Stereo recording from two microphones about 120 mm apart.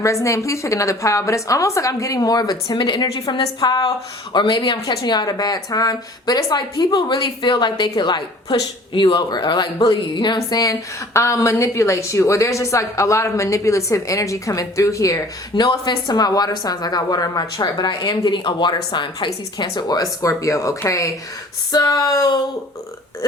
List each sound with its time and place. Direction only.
0.0 s a woman's voice: 25° left (ahead or behind)